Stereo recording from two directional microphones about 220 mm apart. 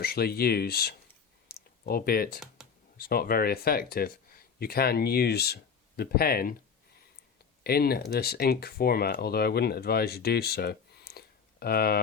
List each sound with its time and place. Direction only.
0.0 s speech: 45° left (ahead or behind)
1.5 s clicking: 45° left (ahead or behind)
3.0 s speech: 45° left (ahead or behind)
7.6 s speech: 45° left (ahead or behind)